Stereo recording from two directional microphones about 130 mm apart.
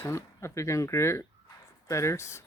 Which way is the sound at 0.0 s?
20° left (ahead or behind).